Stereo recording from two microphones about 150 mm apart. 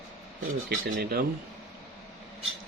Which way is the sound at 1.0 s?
80° right.